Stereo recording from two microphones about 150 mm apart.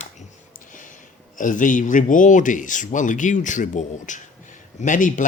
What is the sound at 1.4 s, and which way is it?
Speech, 60° left (ahead or behind).